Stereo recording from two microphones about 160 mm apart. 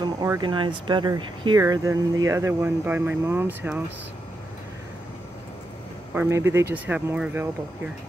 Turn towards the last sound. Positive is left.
turn(degrees=-10)  # may be behind; listen again after turning